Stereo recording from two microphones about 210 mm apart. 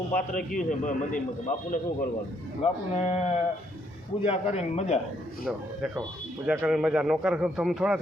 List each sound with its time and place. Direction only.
0.1 s a man's voice: 40° left (ahead or behind)
6.4 s a man's voice: 5° right (ahead or behind)